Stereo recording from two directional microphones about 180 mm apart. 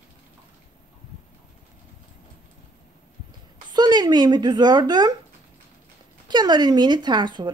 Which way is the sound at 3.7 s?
25° right (ahead or behind).